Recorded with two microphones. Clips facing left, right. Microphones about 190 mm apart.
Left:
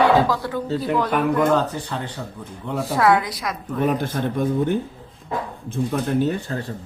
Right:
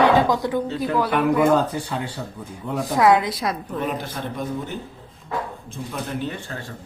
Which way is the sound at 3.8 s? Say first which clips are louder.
Left 5 dB; 50° left (ahead or behind).